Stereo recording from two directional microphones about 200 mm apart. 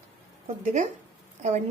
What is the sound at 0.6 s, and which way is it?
Speech, 35° right (ahead or behind).